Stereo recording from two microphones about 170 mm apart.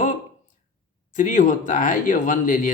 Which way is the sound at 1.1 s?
50° left (ahead or behind).